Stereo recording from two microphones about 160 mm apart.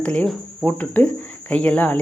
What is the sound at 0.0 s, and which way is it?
Speech, 5° left (ahead or behind).